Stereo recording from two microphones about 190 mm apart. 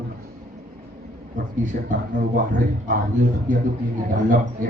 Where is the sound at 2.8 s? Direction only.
45° right (ahead or behind).